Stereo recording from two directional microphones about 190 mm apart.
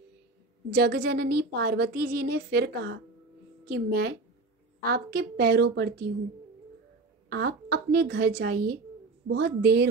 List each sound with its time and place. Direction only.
0.7 s a woman's voice: 60° right (ahead or behind)
7.2 s a woman's voice: 55° right (ahead or behind)